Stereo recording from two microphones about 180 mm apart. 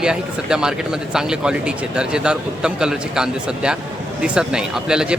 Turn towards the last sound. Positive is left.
turn(degrees=-5)  # may be behind; listen again after turning